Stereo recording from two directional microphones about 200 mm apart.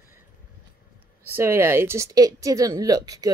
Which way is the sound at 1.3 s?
10° right (ahead or behind).